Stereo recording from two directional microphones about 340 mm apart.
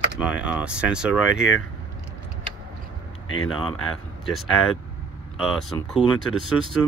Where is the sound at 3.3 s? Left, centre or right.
Left.